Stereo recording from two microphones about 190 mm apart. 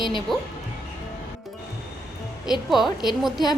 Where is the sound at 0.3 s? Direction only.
Centre (ahead or behind).